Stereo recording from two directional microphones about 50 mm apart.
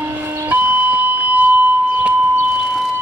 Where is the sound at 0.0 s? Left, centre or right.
Right.